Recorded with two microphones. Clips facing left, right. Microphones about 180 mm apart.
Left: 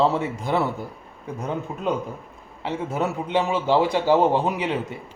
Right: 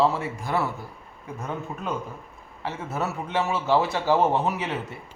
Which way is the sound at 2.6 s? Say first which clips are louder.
Left 4 dB; 15° left (ahead or behind).